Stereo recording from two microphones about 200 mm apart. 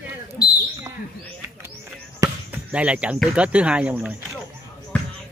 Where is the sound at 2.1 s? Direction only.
10° right (ahead or behind).